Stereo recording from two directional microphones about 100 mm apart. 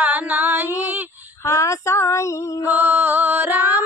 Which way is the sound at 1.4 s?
30° left (ahead or behind).